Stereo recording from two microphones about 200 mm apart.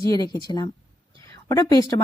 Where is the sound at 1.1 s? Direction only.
15° left (ahead or behind).